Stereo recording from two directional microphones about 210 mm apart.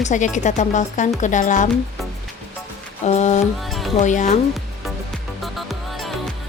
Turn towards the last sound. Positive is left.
turn(degrees=0)  # may be behind; listen again after turning